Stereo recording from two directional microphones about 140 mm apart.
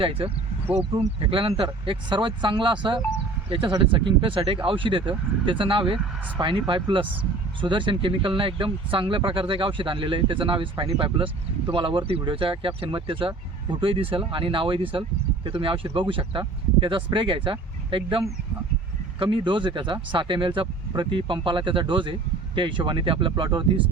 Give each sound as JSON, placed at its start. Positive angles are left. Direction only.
{"t": 0.0, "sound": "speech", "side_deg": -40}
{"t": 6.0, "sound": "speech", "side_deg": -10}
{"t": 6.7, "sound": "speech", "side_deg": -35}